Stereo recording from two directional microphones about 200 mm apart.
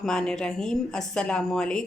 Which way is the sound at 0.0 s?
5° left (ahead or behind).